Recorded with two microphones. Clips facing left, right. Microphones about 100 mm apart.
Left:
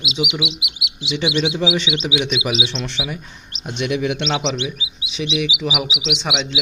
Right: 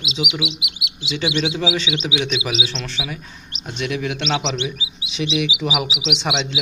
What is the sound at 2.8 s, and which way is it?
Speech, 15° left (ahead or behind).